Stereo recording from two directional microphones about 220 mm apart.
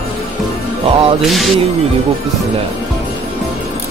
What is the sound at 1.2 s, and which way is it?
Speech, centre (ahead or behind).